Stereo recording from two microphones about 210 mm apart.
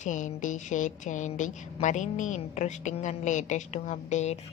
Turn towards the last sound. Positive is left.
turn(degrees=35)  # may be behind; listen again after turning